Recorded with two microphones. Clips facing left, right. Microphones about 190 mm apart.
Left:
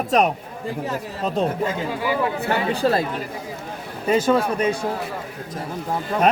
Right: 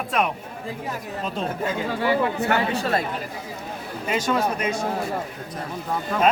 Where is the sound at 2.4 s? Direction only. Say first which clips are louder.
Left 2 dB; 30° left (ahead or behind).